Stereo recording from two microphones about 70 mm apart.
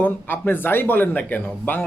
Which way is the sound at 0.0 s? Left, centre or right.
Left.